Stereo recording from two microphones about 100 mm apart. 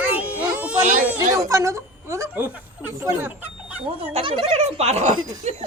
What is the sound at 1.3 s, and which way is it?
A woman's voice, 35° right (ahead or behind).